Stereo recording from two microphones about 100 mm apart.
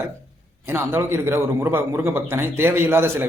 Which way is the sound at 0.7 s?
25° right (ahead or behind).